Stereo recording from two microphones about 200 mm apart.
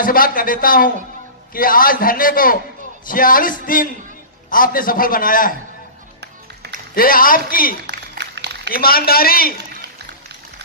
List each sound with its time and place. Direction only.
0.0 s a man's voice: 45° left (ahead or behind)
6.9 s a man's voice: 45° left (ahead or behind)
7.8 s a sound: 60° right (ahead or behind)
8.7 s a man's voice: 45° left (ahead or behind)